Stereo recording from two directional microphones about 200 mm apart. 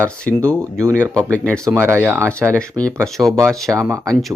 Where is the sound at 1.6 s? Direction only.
15° right (ahead or behind).